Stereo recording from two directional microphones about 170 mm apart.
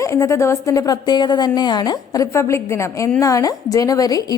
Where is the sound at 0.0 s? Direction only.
15° left (ahead or behind).